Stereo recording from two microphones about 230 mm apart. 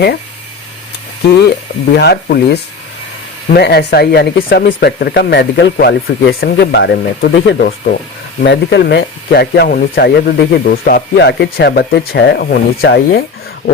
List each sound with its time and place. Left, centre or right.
1.9 s speech: left